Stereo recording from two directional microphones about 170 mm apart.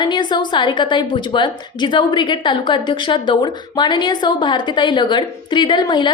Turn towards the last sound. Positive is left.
turn(degrees=25)  # may be behind; listen again after turning